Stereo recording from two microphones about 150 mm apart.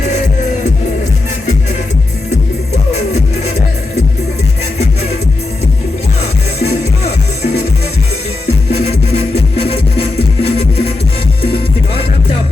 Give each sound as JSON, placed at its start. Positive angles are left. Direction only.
{"t": 2.9, "sound": "music", "side_deg": 45}
{"t": 8.4, "sound": "music", "side_deg": 45}